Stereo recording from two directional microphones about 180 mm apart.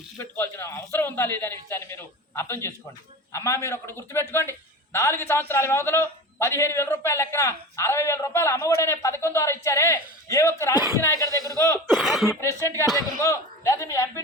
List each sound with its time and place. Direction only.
0.2 s a man's voice: 15° left (ahead or behind)
11.9 s speech: centre (ahead or behind)
12.4 s a man's voice: 15° left (ahead or behind)